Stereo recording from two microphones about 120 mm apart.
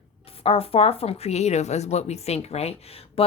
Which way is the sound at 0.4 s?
55° left (ahead or behind).